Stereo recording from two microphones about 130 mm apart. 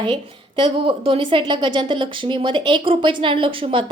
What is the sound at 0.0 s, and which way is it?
A woman's voice, 40° right (ahead or behind).